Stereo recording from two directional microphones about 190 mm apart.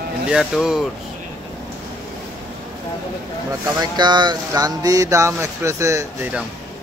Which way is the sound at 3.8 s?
20° right (ahead or behind).